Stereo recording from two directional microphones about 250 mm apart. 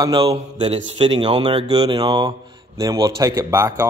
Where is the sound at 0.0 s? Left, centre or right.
Centre.